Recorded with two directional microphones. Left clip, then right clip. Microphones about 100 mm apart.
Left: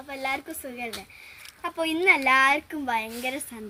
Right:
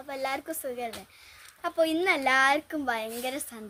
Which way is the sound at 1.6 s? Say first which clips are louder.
Left 3 dB; 20° right (ahead or behind).